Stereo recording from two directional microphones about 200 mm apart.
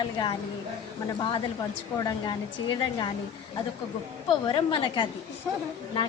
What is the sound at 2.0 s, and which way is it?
A woman's voice, 25° left (ahead or behind).